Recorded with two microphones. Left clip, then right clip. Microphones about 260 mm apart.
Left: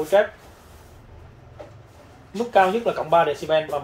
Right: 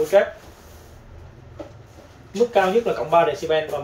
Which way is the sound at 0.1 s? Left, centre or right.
Left.